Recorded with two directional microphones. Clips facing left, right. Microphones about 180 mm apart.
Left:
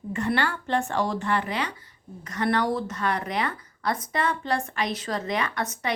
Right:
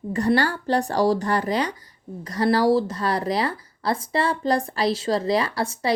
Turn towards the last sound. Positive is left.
turn(degrees=-30)  # may be behind; listen again after turning